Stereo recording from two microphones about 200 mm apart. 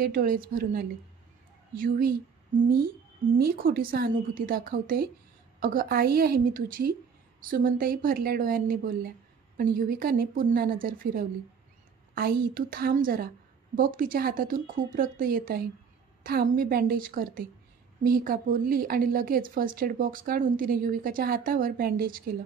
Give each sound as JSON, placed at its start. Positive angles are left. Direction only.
{"t": 0.0, "sound": "speech", "side_deg": -45}
{"t": 3.3, "sound": "speech", "side_deg": -50}